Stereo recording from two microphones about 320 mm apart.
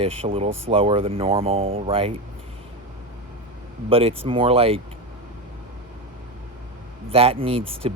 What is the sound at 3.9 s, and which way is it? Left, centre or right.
Speech, centre.